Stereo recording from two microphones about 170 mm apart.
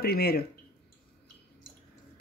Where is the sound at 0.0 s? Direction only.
65° left (ahead or behind).